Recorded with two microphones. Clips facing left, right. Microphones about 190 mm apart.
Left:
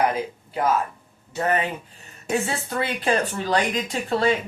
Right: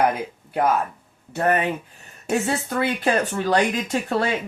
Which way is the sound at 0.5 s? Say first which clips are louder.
Right 2 dB; 60° right (ahead or behind).